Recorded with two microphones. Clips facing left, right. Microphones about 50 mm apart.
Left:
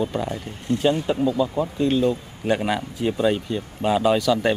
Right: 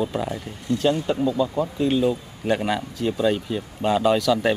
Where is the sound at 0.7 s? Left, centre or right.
Left.